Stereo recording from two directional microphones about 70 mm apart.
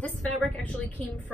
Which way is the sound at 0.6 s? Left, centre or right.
Left.